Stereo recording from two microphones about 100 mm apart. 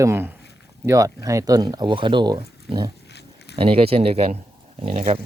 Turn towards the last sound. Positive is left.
turn(degrees=-75)  # may be behind; listen again after turning